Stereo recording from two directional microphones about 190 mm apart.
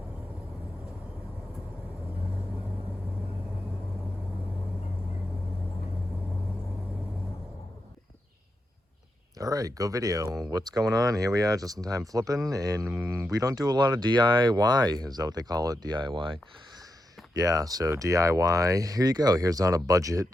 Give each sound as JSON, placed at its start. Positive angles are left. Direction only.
{"t": 9.4, "sound": "speech", "side_deg": -20}